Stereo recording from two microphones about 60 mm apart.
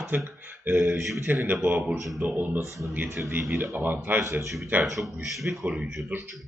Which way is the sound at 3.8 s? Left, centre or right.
Right.